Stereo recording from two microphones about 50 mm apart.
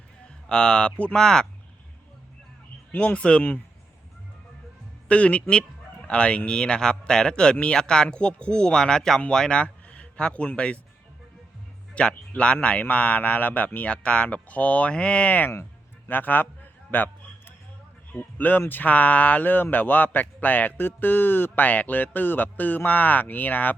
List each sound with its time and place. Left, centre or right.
0.4 s speech: centre
1.1 s speech: centre
3.0 s speech: left
5.0 s speech: left
12.0 s a man's voice: left
16.9 s a sound: left
18.2 s a man's voice: left